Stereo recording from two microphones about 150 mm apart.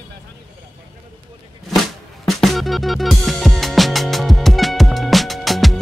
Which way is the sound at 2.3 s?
Centre (ahead or behind).